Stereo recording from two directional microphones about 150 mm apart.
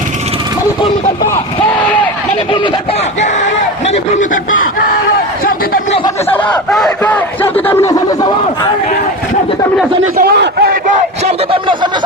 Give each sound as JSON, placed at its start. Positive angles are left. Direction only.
{"t": 3.9, "sound": "speech", "side_deg": 55}
{"t": 6.3, "sound": "speech", "side_deg": 10}
{"t": 10.2, "sound": "a man's voice", "side_deg": -85}
{"t": 11.5, "sound": "speech", "side_deg": -30}